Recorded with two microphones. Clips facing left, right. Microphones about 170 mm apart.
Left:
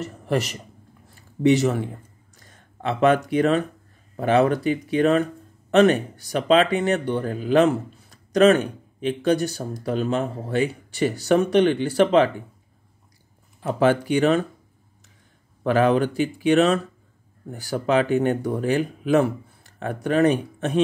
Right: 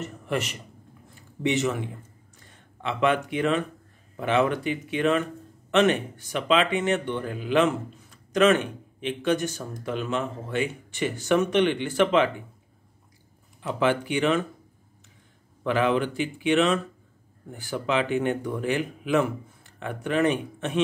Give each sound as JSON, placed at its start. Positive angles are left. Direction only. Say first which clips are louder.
{"t": 0.0, "sound": "speech", "louder": "left 4 dB", "side_deg": 35}
{"t": 2.3, "sound": "a sound", "louder": "left 5 dB", "side_deg": 40}
{"t": 4.2, "sound": "speech", "louder": "left 5 dB", "side_deg": 40}
{"t": 13.6, "sound": "speech", "louder": "left 5 dB", "side_deg": 40}
{"t": 15.6, "sound": "speech", "louder": "left 5 dB", "side_deg": 40}